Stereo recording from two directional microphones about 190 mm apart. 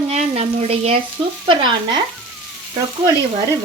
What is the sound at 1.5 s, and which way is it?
Speech, 25° right (ahead or behind).